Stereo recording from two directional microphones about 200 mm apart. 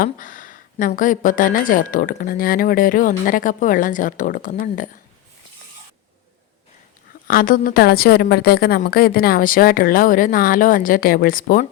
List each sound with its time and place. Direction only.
0.0 s a woman's voice: 40° left (ahead or behind)
7.3 s a woman's voice: 45° left (ahead or behind)